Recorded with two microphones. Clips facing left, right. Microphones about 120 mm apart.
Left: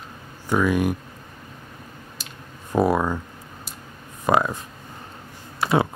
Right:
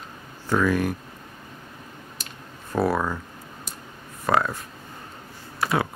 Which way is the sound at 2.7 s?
15° left (ahead or behind).